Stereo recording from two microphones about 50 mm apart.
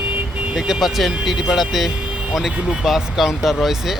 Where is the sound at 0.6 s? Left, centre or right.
Centre.